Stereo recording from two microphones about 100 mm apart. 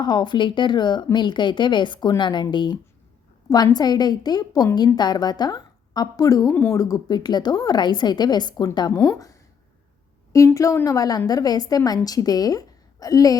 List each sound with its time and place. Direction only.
0.0 s speech: 45° left (ahead or behind)
6.5 s speech: 20° left (ahead or behind)
6.7 s speech: 35° left (ahead or behind)
9.0 s a woman's voice: 35° left (ahead or behind)